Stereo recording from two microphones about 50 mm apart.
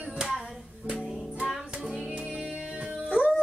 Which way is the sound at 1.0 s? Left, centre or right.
Centre.